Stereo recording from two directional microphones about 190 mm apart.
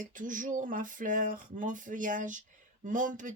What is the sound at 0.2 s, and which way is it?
Speech, 45° right (ahead or behind).